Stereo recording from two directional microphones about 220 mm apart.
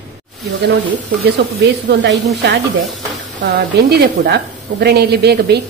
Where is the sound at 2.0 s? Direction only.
50° right (ahead or behind).